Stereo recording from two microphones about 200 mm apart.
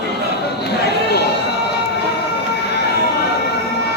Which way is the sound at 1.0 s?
55° left (ahead or behind).